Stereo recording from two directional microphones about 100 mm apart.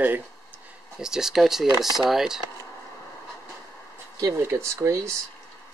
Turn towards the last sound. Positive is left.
turn(degrees=-30)  # may be behind; listen again after turning